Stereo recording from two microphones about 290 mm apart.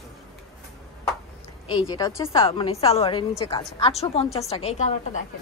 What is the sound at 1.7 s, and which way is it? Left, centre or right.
A woman's voice, centre.